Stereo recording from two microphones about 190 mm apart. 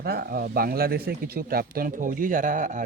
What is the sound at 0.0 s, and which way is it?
Speech, 55° right (ahead or behind).